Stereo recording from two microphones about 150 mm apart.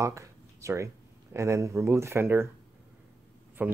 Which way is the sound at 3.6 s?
10° right (ahead or behind).